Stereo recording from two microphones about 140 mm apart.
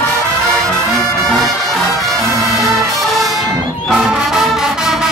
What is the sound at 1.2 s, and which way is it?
Music, centre (ahead or behind).